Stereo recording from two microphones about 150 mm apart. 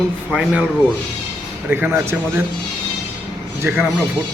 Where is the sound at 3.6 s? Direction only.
15° right (ahead or behind).